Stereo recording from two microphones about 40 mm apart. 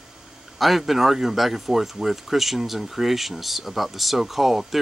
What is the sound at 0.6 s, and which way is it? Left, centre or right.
Speech, centre.